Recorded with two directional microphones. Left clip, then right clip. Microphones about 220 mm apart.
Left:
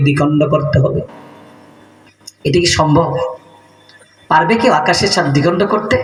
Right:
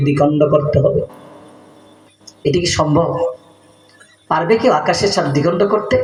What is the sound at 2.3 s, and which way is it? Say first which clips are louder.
Speech: left 3 dB; 55° left (ahead or behind).